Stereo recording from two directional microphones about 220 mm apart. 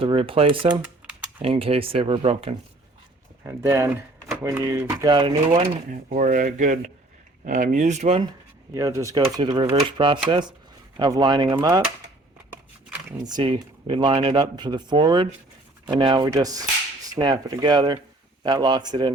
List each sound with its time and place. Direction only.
0.0 s speech: 25° right (ahead or behind)
3.4 s speech: 10° right (ahead or behind)
5.9 s speech: 35° right (ahead or behind)
8.7 s speech: 15° right (ahead or behind)
13.1 s speech: 20° right (ahead or behind)